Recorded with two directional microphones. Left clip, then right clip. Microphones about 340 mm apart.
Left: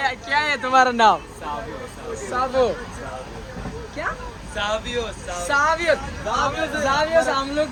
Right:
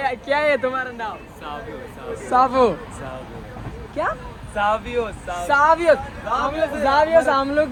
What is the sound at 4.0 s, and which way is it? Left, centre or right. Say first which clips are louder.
Speech: right 4 dB; centre.